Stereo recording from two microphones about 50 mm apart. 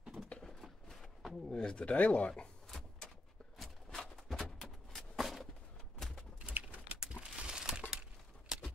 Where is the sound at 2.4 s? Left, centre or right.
Centre.